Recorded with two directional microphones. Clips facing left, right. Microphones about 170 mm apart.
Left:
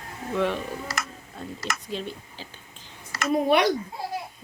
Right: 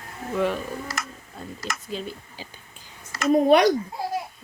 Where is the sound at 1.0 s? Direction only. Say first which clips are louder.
Left 1 dB; 75° left (ahead or behind).